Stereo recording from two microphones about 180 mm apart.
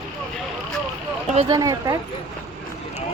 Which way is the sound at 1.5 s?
20° right (ahead or behind).